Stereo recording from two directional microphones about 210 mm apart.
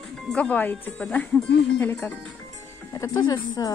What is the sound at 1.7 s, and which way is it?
Speech, 10° left (ahead or behind).